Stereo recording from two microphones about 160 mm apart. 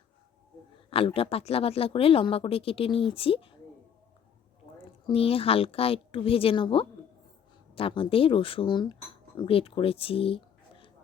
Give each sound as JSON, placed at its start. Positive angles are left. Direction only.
{"t": 0.9, "sound": "speech", "side_deg": 35}
{"t": 5.0, "sound": "speech", "side_deg": 35}